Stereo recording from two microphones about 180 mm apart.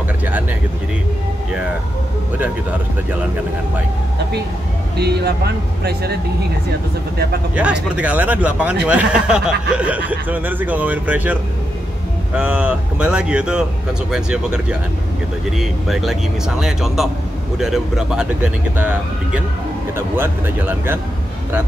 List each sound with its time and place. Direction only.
4.9 s speech: 65° right (ahead or behind)
7.5 s speech: 5° right (ahead or behind)
12.4 s speech: 10° right (ahead or behind)